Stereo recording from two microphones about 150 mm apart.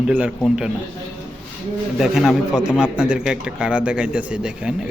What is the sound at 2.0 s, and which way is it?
A man's voice, 5° right (ahead or behind).